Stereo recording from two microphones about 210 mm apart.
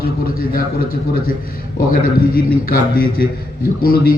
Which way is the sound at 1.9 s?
45° left (ahead or behind).